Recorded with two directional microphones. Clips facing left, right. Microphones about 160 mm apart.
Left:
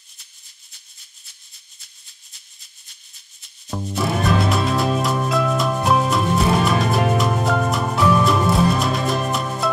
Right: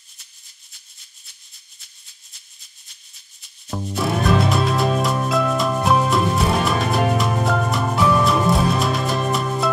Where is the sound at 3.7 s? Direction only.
Centre (ahead or behind).